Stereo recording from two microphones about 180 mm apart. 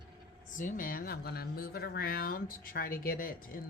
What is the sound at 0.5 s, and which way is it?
Speech, 45° left (ahead or behind).